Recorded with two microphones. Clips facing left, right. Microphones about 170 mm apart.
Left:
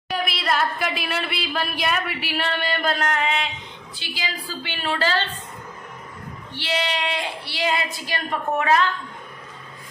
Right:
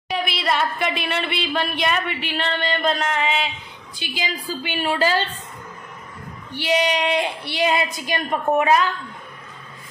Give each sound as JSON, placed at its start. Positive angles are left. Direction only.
{"t": 0.1, "sound": "a woman's voice", "side_deg": 0}
{"t": 4.0, "sound": "a woman's voice", "side_deg": -15}
{"t": 6.5, "sound": "a woman's voice", "side_deg": -15}